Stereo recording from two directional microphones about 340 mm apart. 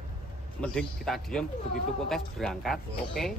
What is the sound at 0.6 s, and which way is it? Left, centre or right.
Speech, centre.